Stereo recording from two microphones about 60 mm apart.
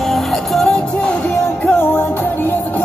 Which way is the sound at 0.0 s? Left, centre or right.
Centre.